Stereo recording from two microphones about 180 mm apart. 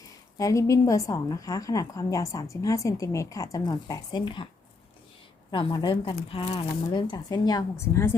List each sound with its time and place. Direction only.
0.3 s a woman's voice: 20° left (ahead or behind)
5.5 s a woman's voice: 25° left (ahead or behind)